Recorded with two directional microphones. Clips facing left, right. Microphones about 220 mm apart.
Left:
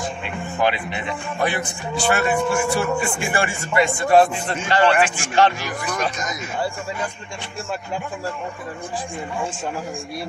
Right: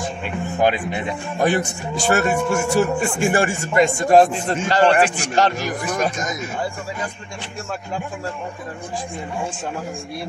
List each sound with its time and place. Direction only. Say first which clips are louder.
0.2 s a man's voice: right 4 dB; 45° right (ahead or behind)